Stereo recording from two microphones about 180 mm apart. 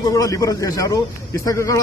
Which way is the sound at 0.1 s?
20° left (ahead or behind).